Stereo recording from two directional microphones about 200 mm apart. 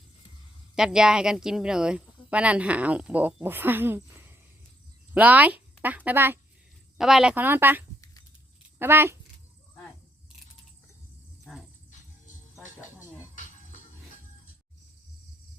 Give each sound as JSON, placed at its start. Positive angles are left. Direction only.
{"t": 0.8, "sound": "speech", "side_deg": -5}
{"t": 11.5, "sound": "a sound", "side_deg": 5}
{"t": 11.9, "sound": "music", "side_deg": 40}